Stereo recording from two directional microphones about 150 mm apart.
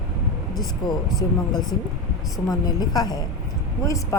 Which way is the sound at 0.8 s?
25° left (ahead or behind).